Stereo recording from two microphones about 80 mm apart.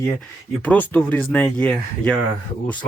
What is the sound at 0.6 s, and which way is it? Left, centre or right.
Speech, centre.